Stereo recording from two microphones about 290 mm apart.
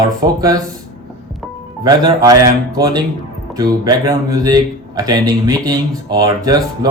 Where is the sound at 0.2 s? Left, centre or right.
Centre.